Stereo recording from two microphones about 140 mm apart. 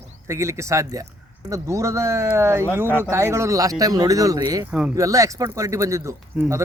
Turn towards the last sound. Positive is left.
turn(degrees=-20)  # may be behind; listen again after turning